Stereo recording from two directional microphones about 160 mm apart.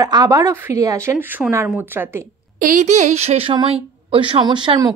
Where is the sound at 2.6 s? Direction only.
50° right (ahead or behind).